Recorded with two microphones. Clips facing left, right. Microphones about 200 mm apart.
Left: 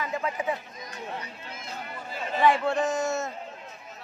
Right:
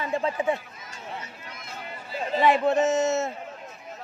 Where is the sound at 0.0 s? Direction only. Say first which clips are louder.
Right 4 dB; 30° right (ahead or behind).